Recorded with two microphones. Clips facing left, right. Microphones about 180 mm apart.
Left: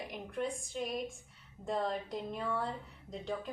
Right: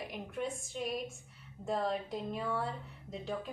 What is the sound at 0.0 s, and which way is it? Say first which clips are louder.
A woman's voice: left 1 dB; centre (ahead or behind).